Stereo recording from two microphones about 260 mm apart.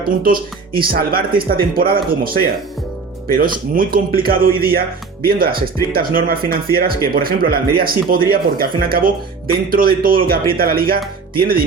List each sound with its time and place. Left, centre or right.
0.2 s speech: right